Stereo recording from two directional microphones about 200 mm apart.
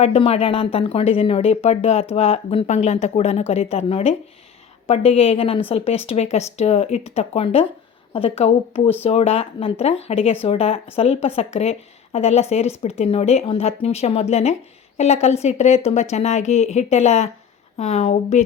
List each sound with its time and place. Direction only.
0.0 s a woman's voice: 30° left (ahead or behind)